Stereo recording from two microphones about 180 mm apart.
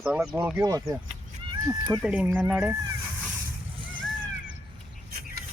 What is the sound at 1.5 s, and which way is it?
Cat, 15° right (ahead or behind).